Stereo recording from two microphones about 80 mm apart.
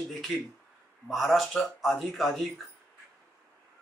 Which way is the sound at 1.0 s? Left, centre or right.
Centre.